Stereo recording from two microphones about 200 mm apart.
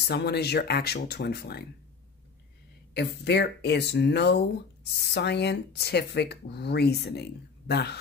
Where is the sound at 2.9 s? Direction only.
55° left (ahead or behind).